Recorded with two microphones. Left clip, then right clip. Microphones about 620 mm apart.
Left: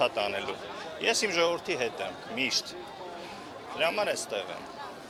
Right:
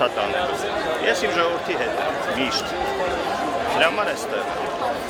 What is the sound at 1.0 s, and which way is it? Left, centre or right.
Speech, left.